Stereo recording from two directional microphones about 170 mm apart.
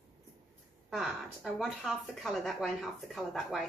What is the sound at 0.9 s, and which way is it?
A woman's voice, centre (ahead or behind).